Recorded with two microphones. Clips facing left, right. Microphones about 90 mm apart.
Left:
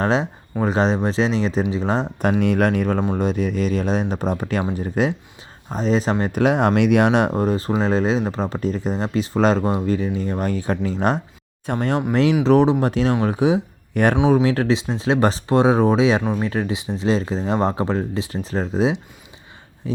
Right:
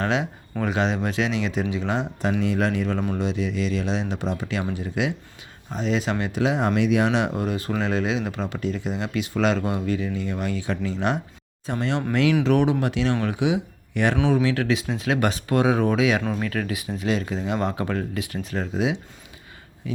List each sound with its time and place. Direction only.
0.0 s speech: 35° left (ahead or behind)
2.4 s speech: 55° left (ahead or behind); by 6.4 s 40° left (ahead or behind)
6.4 s speech: 55° left (ahead or behind)
12.1 s speech: 35° left (ahead or behind)
14.3 s speech: 35° left (ahead or behind)